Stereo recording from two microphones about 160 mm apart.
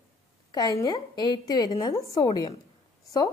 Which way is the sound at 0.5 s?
25° left (ahead or behind).